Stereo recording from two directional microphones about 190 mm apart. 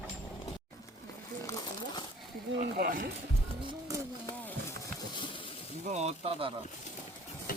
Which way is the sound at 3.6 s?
20° right (ahead or behind).